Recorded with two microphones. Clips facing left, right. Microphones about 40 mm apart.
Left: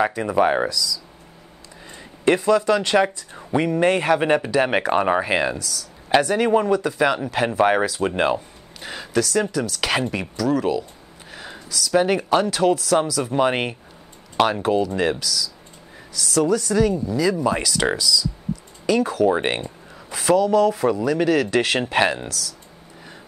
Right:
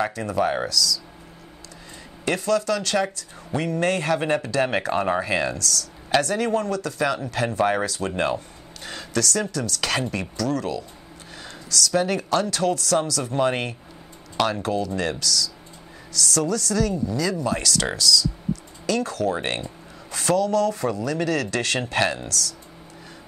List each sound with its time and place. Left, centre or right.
0.0 s speech: left
2.2 s speech: left
7.8 s speech: centre
11.3 s a sound: centre
12.0 s speech: centre